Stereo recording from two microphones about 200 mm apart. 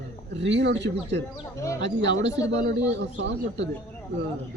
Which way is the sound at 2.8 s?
65° right (ahead or behind).